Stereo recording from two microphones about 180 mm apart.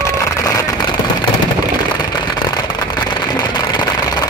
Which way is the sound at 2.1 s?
25° left (ahead or behind).